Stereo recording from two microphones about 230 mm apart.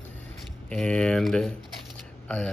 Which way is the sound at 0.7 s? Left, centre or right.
Centre.